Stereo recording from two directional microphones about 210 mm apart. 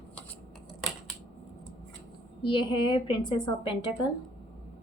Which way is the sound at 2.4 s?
25° left (ahead or behind).